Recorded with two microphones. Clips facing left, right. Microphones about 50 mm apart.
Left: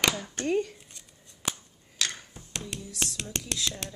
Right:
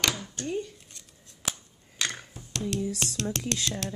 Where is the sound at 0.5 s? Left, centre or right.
Left.